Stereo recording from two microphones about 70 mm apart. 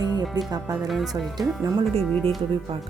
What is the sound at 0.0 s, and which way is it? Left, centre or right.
Speech, right.